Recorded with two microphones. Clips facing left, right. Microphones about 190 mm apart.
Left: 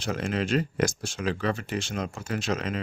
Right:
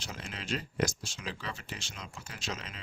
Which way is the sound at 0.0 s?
65° left (ahead or behind).